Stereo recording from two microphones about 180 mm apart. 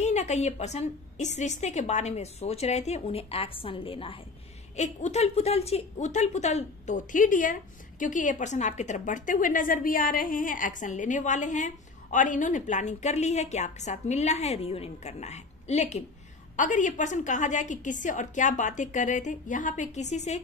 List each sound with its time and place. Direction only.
0.0 s a woman's voice: 40° left (ahead or behind)
4.7 s a woman's voice: 40° left (ahead or behind)